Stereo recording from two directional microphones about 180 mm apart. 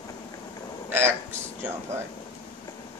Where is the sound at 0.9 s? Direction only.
15° right (ahead or behind).